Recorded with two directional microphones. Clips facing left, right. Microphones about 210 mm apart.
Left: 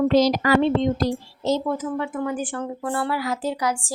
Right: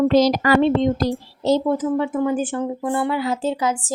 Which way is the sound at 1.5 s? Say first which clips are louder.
Right 5 dB; 30° right (ahead or behind).